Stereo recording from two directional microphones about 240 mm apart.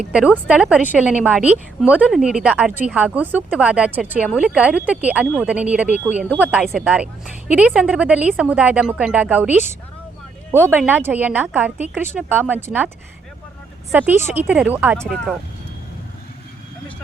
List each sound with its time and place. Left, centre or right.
0.0 s a woman's voice: centre
13.9 s speech: centre
14.9 s a woman's voice: centre